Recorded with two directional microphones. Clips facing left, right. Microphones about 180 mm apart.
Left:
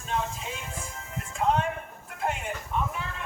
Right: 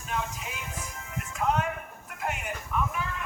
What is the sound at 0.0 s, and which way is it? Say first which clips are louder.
Music: left 2 dB; 30° left (ahead or behind).